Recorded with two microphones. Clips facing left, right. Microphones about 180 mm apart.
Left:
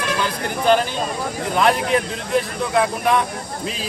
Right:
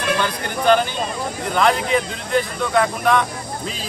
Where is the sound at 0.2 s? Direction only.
Centre (ahead or behind).